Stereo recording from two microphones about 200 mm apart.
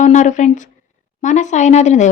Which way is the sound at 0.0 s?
40° left (ahead or behind).